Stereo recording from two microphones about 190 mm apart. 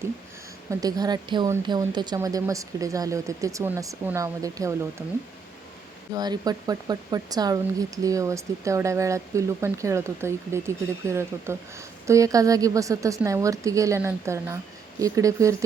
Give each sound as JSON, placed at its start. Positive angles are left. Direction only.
{"t": 0.7, "sound": "speech", "side_deg": -20}
{"t": 6.1, "sound": "speech", "side_deg": -20}